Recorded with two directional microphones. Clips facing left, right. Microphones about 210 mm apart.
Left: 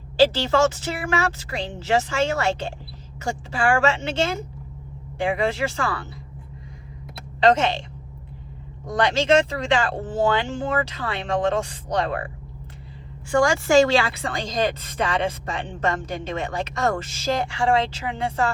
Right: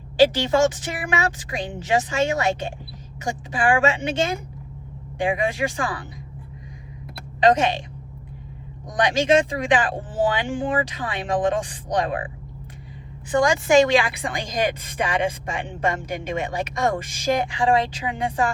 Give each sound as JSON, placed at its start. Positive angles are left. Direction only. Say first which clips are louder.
{"t": 0.2, "sound": "a woman's voice", "louder": "right 1 dB", "side_deg": -15}
{"t": 7.4, "sound": "a woman's voice", "louder": "even", "side_deg": -15}
{"t": 8.9, "sound": "a woman's voice", "louder": "even", "side_deg": -15}
{"t": 13.3, "sound": "a woman's voice", "louder": "even", "side_deg": -20}